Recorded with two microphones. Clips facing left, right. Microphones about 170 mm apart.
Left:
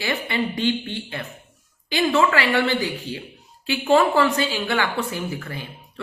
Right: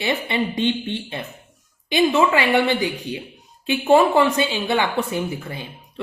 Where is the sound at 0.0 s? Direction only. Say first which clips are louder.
Right 2 dB; 20° right (ahead or behind).